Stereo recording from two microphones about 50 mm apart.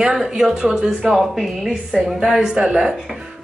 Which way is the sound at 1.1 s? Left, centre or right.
Centre.